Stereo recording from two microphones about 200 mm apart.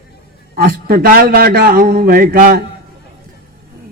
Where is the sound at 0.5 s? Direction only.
45° right (ahead or behind).